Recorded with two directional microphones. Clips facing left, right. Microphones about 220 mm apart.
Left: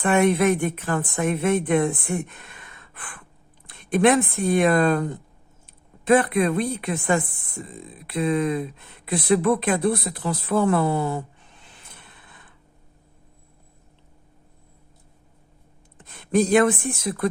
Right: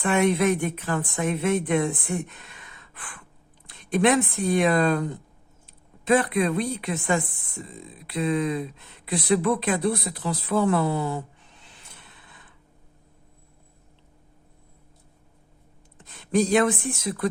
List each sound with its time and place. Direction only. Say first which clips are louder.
0.0 s speech: left 2 dB; 50° left (ahead or behind)
11.9 s a sound: left 2 dB; 55° left (ahead or behind)
16.0 s speech: left 2 dB; 55° left (ahead or behind)